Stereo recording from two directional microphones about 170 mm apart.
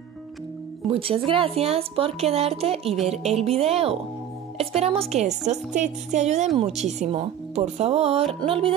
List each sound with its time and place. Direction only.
0.8 s a woman's voice: 35° right (ahead or behind)